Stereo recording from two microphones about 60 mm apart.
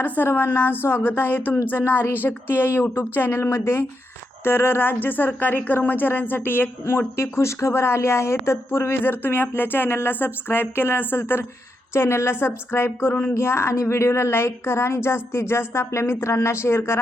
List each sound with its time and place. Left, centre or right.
0.0 s speech: left
7.2 s speech: left
13.3 s speech: left